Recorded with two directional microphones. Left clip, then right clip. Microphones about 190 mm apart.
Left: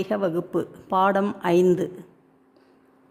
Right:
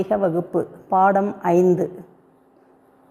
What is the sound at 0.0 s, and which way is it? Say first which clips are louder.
Speech: right 4 dB; 25° left (ahead or behind).